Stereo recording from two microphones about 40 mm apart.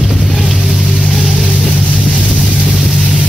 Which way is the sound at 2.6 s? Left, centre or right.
Centre.